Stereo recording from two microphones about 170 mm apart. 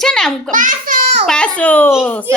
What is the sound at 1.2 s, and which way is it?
A child's voice, 5° left (ahead or behind).